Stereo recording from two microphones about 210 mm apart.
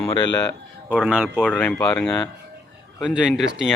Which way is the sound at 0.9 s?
5° right (ahead or behind).